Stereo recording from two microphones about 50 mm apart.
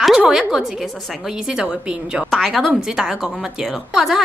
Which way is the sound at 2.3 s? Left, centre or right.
Centre.